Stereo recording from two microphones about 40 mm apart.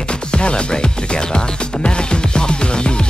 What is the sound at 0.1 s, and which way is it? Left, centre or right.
Music, left.